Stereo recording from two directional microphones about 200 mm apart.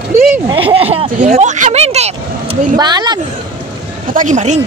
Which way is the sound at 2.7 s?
20° right (ahead or behind).